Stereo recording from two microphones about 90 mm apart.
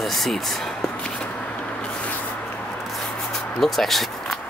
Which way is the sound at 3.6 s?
5° left (ahead or behind).